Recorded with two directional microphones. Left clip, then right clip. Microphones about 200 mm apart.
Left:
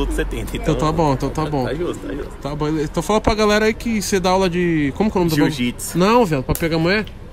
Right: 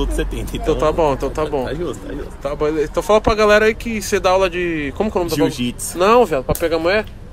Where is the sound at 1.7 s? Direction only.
5° left (ahead or behind).